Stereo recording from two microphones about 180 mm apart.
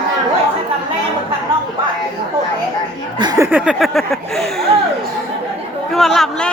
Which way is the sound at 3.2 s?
20° right (ahead or behind).